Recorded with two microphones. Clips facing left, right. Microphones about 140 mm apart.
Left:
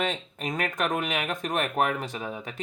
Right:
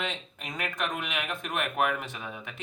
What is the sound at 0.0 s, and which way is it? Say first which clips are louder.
Speech: left 6 dB; 45° left (ahead or behind).